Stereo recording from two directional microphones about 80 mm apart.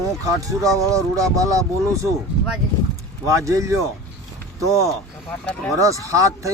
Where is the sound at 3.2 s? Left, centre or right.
Right.